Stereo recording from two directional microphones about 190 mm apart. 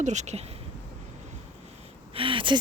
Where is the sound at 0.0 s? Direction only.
40° right (ahead or behind).